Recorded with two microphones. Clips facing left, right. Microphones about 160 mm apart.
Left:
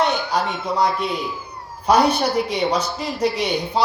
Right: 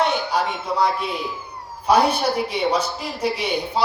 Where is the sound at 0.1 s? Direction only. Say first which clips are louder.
Even; 5° right (ahead or behind).